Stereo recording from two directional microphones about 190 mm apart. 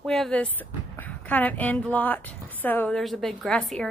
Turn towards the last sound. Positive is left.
turn(degrees=5)  # may be behind; listen again after turning